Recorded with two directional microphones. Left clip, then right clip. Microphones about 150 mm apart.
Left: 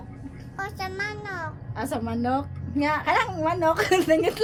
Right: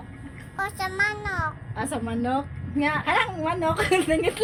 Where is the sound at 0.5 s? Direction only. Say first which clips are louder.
Right 4 dB; 15° left (ahead or behind).